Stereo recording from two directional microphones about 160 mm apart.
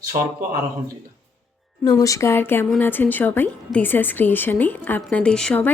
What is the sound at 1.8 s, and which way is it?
A woman's voice, 20° left (ahead or behind).